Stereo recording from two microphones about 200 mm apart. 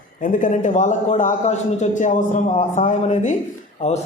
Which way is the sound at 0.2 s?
40° left (ahead or behind).